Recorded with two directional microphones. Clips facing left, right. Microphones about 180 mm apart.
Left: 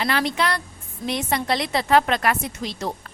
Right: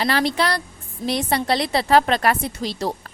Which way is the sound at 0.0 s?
35° right (ahead or behind).